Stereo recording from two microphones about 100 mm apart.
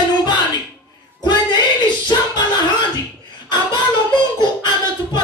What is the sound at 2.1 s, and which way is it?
Music, 45° left (ahead or behind).